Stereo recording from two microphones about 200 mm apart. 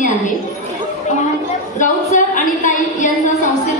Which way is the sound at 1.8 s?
40° left (ahead or behind).